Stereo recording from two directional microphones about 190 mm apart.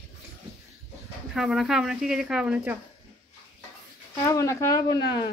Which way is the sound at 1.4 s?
Centre (ahead or behind).